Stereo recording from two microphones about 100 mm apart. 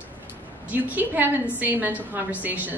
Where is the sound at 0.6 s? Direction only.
15° right (ahead or behind).